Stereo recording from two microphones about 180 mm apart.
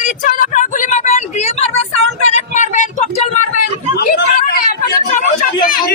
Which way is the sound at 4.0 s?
65° left (ahead or behind).